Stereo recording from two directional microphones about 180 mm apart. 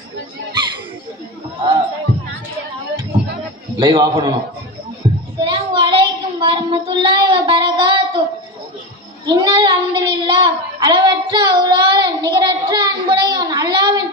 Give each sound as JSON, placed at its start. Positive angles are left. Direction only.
{"t": 3.8, "sound": "a child's voice", "side_deg": -25}
{"t": 5.0, "sound": "a sound", "side_deg": -30}
{"t": 5.4, "sound": "child singing", "side_deg": -25}
{"t": 9.2, "sound": "a child's voice", "side_deg": -25}